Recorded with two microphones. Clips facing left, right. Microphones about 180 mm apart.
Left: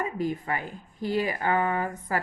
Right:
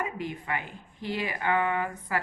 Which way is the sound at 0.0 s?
40° left (ahead or behind).